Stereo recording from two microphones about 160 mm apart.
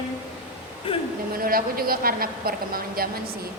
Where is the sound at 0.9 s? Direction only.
35° left (ahead or behind).